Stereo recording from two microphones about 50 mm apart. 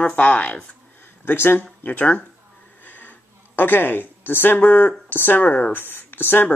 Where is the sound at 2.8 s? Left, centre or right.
Left.